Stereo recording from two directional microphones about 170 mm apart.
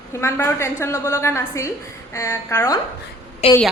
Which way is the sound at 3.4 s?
35° left (ahead or behind).